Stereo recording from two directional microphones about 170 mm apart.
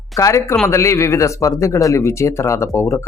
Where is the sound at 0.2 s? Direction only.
15° left (ahead or behind).